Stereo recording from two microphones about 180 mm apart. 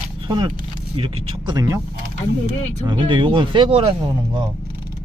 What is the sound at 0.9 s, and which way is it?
Speech, 25° right (ahead or behind).